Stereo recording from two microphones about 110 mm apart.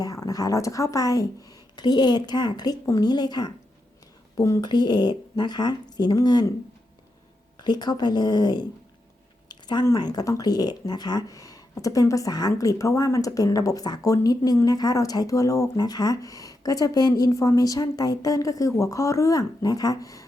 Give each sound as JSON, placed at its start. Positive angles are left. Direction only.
{"t": 0.0, "sound": "a woman's voice", "side_deg": 35}
{"t": 4.4, "sound": "speech", "side_deg": 25}
{"t": 4.6, "sound": "a woman's voice", "side_deg": 40}
{"t": 7.6, "sound": "a woman's voice", "side_deg": 40}
{"t": 9.5, "sound": "a sound", "side_deg": 40}
{"t": 9.8, "sound": "a woman's voice", "side_deg": 35}